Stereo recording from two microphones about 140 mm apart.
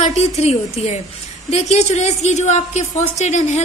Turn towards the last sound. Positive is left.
turn(degrees=55)  # may be behind; listen again after turning